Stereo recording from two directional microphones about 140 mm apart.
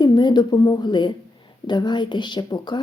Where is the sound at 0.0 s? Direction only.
30° left (ahead or behind).